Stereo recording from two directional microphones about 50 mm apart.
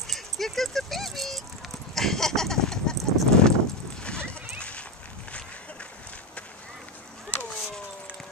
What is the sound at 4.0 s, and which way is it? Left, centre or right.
Clip-clop, centre.